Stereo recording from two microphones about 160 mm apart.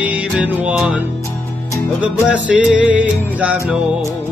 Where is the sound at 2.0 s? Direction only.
5° right (ahead or behind).